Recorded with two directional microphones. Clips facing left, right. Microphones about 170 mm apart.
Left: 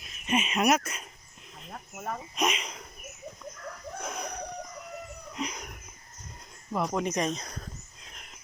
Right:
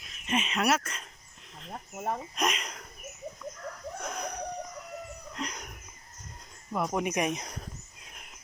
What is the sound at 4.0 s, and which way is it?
Chicken, 5° left (ahead or behind).